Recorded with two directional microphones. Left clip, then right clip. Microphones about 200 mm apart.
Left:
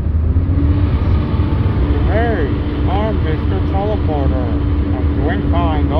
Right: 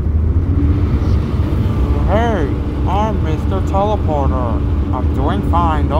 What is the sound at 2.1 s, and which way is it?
Vehicle, 25° right (ahead or behind).